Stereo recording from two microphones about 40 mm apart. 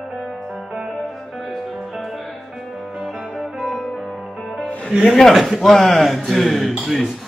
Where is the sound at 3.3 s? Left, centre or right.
Centre.